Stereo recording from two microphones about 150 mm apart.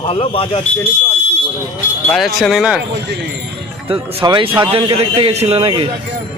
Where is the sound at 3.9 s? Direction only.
35° right (ahead or behind).